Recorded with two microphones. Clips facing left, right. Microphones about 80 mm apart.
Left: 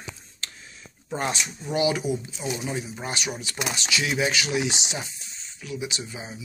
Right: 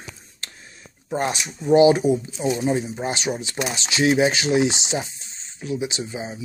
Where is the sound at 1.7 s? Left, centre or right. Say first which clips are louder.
Right 10 dB; right.